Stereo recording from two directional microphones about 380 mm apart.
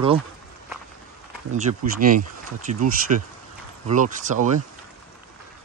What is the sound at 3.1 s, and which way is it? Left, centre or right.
Speech, right.